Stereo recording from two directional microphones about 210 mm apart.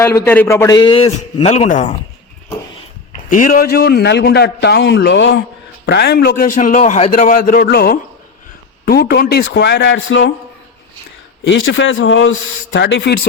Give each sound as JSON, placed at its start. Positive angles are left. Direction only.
{"t": 0.0, "sound": "a man's voice", "side_deg": 10}
{"t": 3.2, "sound": "a man's voice", "side_deg": 40}
{"t": 11.4, "sound": "a man's voice", "side_deg": 60}